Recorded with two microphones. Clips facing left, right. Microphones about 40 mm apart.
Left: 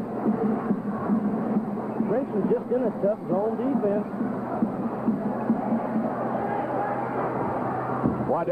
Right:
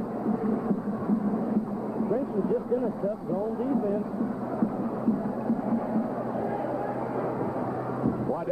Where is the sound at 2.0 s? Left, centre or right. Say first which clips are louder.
Left 3 dB; left.